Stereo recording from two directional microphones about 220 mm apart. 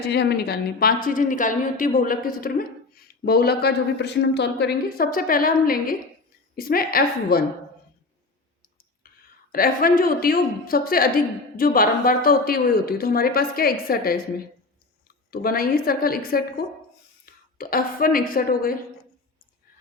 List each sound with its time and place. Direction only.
0.1 s a woman's voice: 50° left (ahead or behind)
9.5 s a woman's voice: 40° left (ahead or behind)
17.3 s whispering: 40° left (ahead or behind)
17.6 s a woman's voice: 40° left (ahead or behind)